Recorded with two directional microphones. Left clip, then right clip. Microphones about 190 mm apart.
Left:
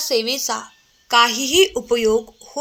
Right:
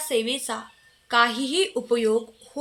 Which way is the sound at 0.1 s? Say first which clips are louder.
Left 4 dB; 20° left (ahead or behind).